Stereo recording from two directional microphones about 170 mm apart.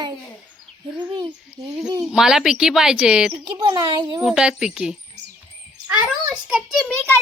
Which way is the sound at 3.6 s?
25° right (ahead or behind).